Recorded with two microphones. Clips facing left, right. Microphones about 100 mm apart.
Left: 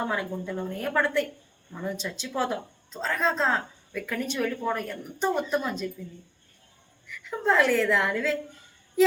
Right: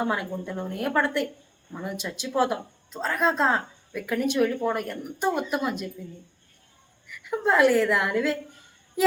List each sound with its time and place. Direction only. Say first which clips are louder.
0.0 s speech: right 2 dB; 5° right (ahead or behind)
7.1 s speech: right 1 dB; 10° right (ahead or behind)